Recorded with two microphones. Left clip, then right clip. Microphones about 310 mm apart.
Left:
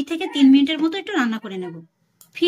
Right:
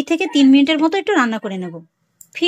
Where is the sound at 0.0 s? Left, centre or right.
Centre.